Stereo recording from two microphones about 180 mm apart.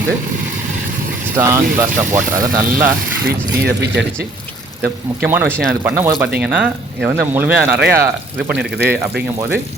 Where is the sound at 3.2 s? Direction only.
65° right (ahead or behind).